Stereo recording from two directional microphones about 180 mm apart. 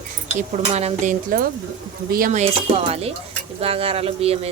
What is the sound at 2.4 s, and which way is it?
Speech, 35° right (ahead or behind).